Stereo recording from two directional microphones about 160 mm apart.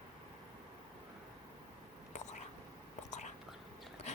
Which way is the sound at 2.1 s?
45° left (ahead or behind).